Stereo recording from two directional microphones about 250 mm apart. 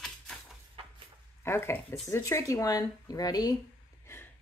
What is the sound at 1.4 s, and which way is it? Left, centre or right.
Speech, centre.